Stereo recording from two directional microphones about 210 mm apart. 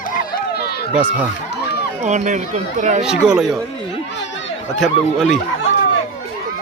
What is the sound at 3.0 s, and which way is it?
Speech, 5° right (ahead or behind).